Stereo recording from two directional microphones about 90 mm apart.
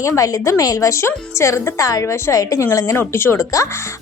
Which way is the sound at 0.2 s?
35° left (ahead or behind).